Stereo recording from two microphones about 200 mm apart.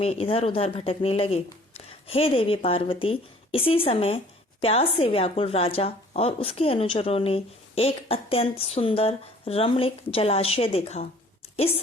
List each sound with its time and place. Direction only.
0.0 s speech: 30° left (ahead or behind)